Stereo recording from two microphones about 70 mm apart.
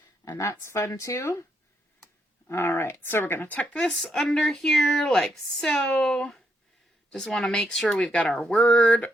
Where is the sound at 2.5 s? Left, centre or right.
Left.